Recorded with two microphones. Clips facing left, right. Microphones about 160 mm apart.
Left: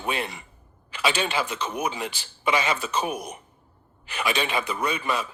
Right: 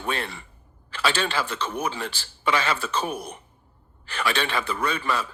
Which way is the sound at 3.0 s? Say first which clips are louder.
Left 1 dB; 30° right (ahead or behind).